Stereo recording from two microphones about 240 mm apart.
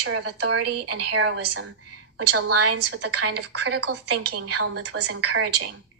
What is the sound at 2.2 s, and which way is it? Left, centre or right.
A woman's voice, right.